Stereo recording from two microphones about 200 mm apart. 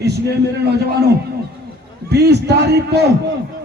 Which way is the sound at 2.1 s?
55° right (ahead or behind).